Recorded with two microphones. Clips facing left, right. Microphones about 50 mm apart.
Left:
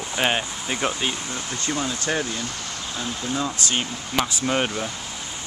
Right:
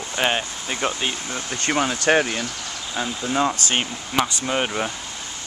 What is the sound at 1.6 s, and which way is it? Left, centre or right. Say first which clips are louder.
Speech: right 6 dB; right.